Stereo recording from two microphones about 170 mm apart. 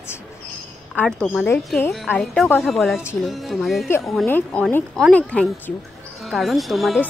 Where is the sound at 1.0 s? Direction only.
10° left (ahead or behind).